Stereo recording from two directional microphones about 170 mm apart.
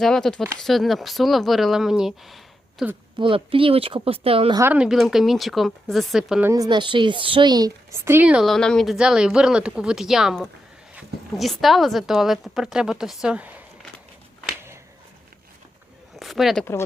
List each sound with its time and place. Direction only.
0.0 s a woman's voice: 5° left (ahead or behind)
3.2 s speech: 30° right (ahead or behind)
4.5 s a woman's voice: 10° right (ahead or behind)
6.5 s a woman's voice: 25° right (ahead or behind); by 13.6 s 10° right (ahead or behind)
16.1 s a sound: centre (ahead or behind)